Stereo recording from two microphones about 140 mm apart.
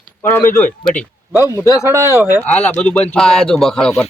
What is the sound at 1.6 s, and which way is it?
Speech, 25° left (ahead or behind).